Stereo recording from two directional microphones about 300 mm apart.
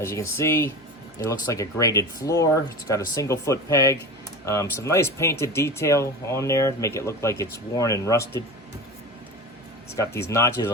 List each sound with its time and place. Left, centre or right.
0.0 s speech: centre
9.9 s speech: centre